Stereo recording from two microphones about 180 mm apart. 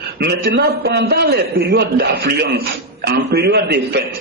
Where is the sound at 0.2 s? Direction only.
65° right (ahead or behind).